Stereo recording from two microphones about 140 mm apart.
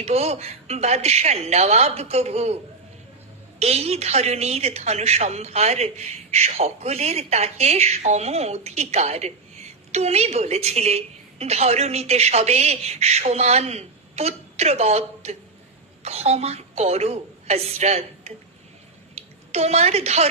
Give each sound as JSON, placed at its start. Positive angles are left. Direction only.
{"t": 0.0, "sound": "a woman's voice", "side_deg": -50}
{"t": 3.6, "sound": "a woman's voice", "side_deg": -50}